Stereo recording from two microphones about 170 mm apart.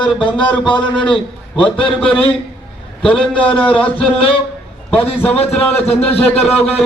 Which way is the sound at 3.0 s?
5° left (ahead or behind).